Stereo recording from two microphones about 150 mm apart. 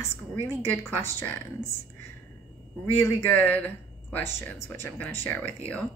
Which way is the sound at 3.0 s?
15° left (ahead or behind).